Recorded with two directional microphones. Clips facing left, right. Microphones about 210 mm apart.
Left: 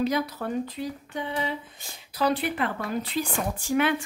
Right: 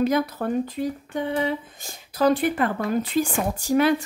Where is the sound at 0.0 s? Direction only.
50° right (ahead or behind).